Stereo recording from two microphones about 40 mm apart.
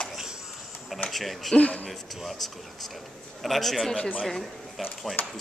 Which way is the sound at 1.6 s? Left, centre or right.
Left.